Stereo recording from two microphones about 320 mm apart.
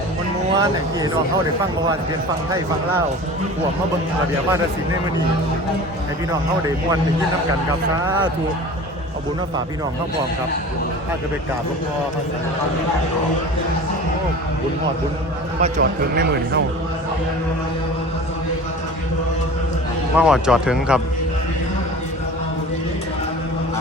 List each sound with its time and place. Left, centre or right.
0.6 s speech: centre
15.6 s speech: right
20.1 s speech: centre